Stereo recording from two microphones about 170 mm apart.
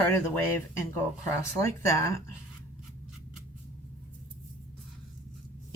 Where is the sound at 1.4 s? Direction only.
15° left (ahead or behind).